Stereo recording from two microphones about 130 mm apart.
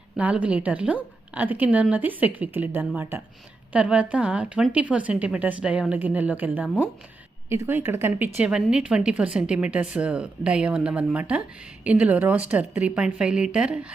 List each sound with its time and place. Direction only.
0.2 s speech: 10° right (ahead or behind)